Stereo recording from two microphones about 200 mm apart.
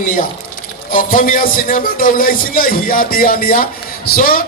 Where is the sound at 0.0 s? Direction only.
45° left (ahead or behind).